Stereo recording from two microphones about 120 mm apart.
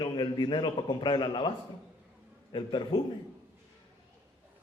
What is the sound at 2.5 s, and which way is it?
Speech, 45° left (ahead or behind).